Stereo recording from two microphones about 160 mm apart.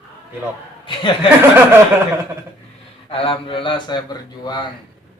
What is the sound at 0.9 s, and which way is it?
Speech, 30° left (ahead or behind).